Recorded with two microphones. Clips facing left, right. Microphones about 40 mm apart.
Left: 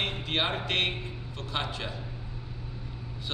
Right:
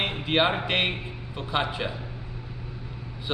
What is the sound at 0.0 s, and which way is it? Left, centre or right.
A man's voice, centre.